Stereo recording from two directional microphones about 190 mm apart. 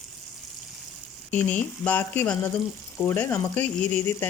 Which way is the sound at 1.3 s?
10° left (ahead or behind).